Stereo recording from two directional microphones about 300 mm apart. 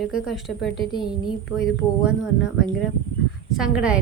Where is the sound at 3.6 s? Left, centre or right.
Centre.